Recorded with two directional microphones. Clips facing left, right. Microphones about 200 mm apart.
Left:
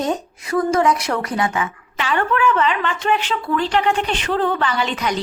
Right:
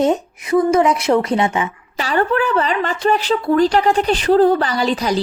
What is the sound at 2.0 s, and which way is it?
Speech, 35° right (ahead or behind).